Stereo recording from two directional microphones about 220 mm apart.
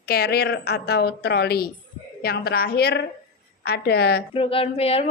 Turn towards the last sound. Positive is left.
turn(degrees=25)  # may be behind; listen again after turning